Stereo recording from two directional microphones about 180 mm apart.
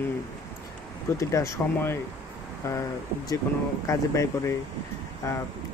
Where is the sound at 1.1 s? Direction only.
15° left (ahead or behind).